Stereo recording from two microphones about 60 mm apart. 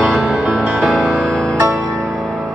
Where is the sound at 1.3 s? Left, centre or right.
Centre.